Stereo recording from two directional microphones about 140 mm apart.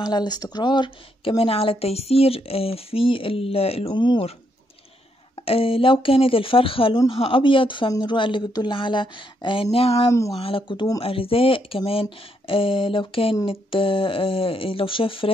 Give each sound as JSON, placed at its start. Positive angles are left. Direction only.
{"t": 0.0, "sound": "a woman's voice", "side_deg": 30}
{"t": 5.3, "sound": "a woman's voice", "side_deg": 40}
{"t": 10.0, "sound": "speech", "side_deg": 25}
{"t": 10.4, "sound": "a woman's voice", "side_deg": 40}